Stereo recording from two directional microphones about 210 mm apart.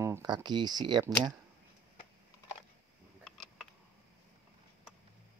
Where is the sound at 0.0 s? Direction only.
15° right (ahead or behind).